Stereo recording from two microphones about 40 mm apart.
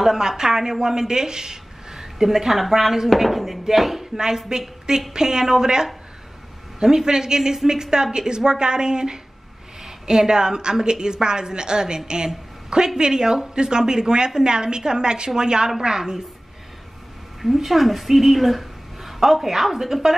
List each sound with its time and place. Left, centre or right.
0.0 s a woman's voice: centre
4.2 s a woman's voice: centre
17.4 s a woman's voice: centre